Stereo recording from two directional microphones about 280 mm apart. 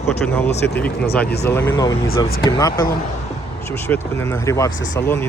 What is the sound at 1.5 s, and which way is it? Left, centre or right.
Speech, centre.